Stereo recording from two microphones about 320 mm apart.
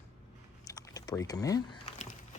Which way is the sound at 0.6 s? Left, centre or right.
Centre.